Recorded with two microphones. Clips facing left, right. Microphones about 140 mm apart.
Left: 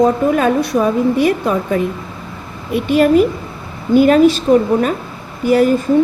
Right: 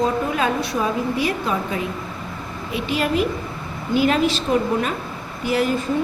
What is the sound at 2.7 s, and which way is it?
A woman's voice, 50° left (ahead or behind).